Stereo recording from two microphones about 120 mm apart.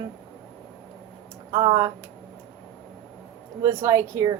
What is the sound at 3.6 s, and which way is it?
Speech, 25° right (ahead or behind).